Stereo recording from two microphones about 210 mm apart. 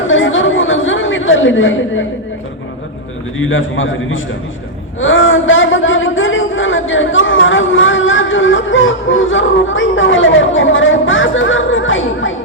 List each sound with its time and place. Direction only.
0.1 s chatter: 65° left (ahead or behind)
3.3 s a man's voice: 70° left (ahead or behind)